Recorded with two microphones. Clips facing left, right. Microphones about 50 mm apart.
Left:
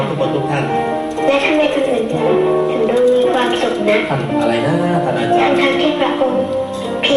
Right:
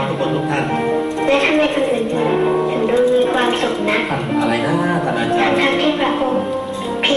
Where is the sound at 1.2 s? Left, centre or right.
Centre.